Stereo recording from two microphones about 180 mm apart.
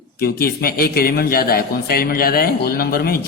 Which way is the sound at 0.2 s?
60° left (ahead or behind).